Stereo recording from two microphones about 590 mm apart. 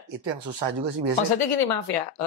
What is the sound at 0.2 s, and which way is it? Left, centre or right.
Speech, right.